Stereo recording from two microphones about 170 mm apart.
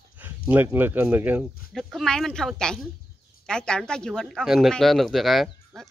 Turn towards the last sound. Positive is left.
turn(degrees=0)  # may be behind; listen again after turning